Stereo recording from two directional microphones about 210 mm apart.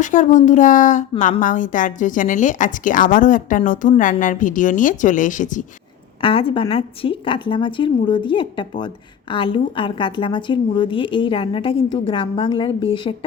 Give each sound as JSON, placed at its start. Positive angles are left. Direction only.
{"t": 0.0, "sound": "a woman's voice", "side_deg": 35}
{"t": 6.2, "sound": "a woman's voice", "side_deg": 25}